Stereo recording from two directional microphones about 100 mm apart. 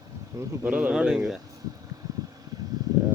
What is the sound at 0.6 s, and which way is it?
Speech, 10° right (ahead or behind).